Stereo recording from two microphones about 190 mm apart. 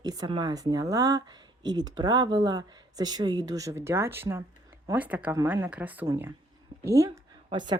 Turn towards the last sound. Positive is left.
turn(degrees=-25)  # may be behind; listen again after turning